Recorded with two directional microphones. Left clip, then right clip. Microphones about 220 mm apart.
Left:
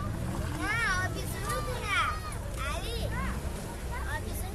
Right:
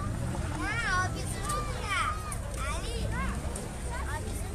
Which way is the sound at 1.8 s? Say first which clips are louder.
Left 2 dB; 25° left (ahead or behind).